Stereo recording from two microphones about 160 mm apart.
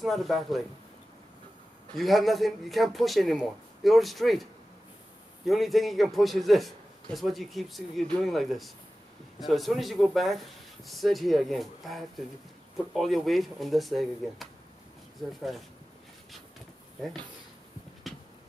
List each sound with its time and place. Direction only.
0.0 s speech: centre (ahead or behind)
2.0 s speech: centre (ahead or behind)
18.1 s a sound: centre (ahead or behind)